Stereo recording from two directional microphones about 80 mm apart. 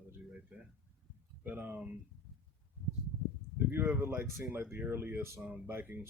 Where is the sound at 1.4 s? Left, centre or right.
Right.